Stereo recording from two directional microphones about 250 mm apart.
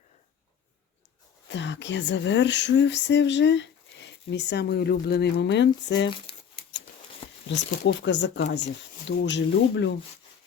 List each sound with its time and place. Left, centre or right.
1.5 s speech: left
7.4 s speech: left